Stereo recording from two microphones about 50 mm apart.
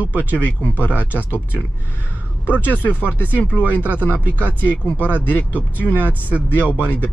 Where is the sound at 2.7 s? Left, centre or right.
Left.